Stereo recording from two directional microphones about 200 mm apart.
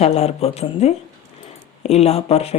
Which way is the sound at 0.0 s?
30° left (ahead or behind).